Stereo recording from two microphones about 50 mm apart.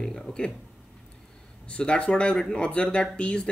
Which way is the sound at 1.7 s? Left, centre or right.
Left.